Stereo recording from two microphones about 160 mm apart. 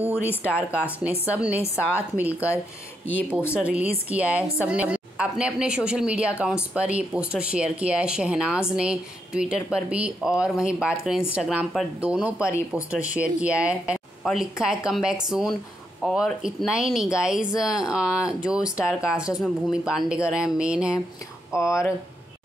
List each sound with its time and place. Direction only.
0.1 s speech: 15° left (ahead or behind)
1.3 s a woman's voice: 10° right (ahead or behind)
21.5 s speech: 20° left (ahead or behind)